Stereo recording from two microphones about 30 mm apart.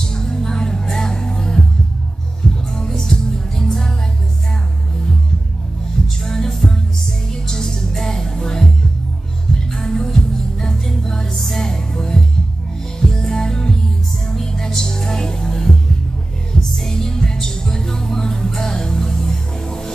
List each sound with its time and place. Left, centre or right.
0.0 s music: left
6.0 s music: centre
9.7 s music: centre
16.7 s music: centre